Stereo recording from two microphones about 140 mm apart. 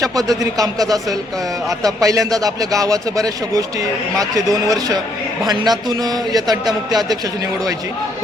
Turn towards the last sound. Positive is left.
turn(degrees=-25)  # may be behind; listen again after turning